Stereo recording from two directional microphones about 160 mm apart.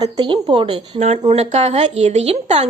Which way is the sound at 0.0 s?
30° right (ahead or behind).